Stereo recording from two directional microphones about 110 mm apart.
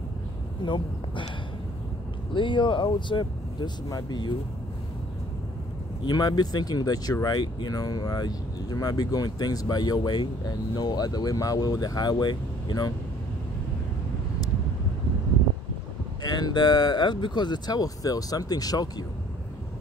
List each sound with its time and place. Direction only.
0.7 s speech: 45° left (ahead or behind)
2.3 s speech: 45° left (ahead or behind)
6.0 s speech: 40° left (ahead or behind)
16.2 s speech: 40° left (ahead or behind)